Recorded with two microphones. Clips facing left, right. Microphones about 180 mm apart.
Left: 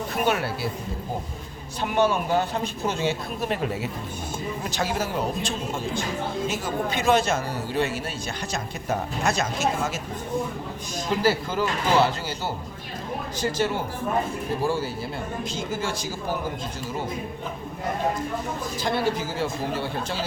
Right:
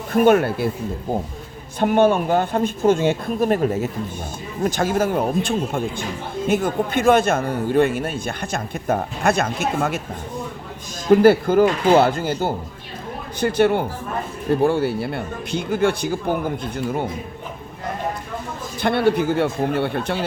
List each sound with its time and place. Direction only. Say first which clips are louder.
0.1 s speech: right 11 dB; 50° right (ahead or behind)
1.8 s a man's voice: right 7 dB; 55° right (ahead or behind)
11.1 s a man's voice: right 11 dB; 55° right (ahead or behind)
18.8 s a man's voice: right 8 dB; 60° right (ahead or behind)